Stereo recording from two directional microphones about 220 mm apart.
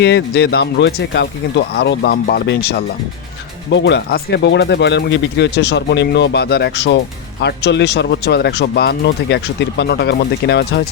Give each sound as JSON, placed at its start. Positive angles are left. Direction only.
{"t": 0.0, "sound": "speech", "side_deg": 50}